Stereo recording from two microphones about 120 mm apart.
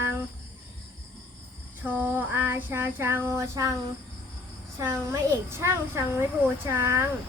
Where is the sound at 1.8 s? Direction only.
15° right (ahead or behind).